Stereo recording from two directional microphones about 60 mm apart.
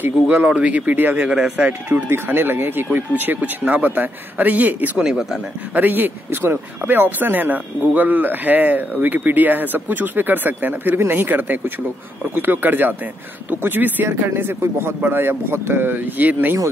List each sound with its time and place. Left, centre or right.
0.5 s speech: right
2.0 s a man's voice: right
5.0 s speech: centre
5.8 s a man's voice: right